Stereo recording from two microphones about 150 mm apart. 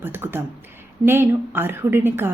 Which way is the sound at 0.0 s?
15° right (ahead or behind).